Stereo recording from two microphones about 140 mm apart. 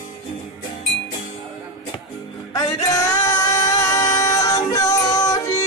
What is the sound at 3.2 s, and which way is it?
Music, 20° left (ahead or behind).